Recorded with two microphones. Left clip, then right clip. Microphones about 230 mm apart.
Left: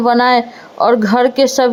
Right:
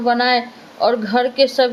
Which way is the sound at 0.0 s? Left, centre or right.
Left.